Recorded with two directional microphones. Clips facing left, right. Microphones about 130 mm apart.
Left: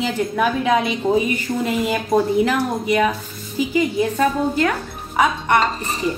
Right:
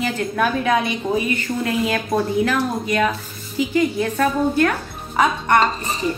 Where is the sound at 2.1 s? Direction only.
15° left (ahead or behind).